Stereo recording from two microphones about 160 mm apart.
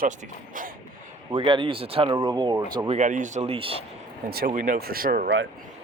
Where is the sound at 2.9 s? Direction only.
50° right (ahead or behind).